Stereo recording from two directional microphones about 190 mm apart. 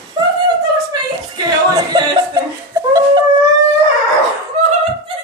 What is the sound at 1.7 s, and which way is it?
Music, 15° right (ahead or behind).